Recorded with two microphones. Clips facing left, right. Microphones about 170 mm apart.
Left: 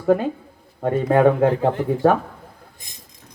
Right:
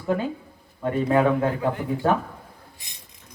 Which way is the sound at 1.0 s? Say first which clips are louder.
Left 5 dB; 45° left (ahead or behind).